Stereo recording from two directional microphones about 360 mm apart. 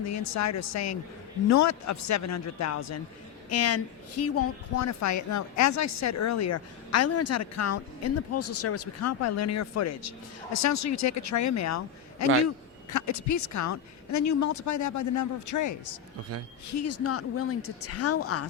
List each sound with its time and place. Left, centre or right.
0.0 s a woman's voice: left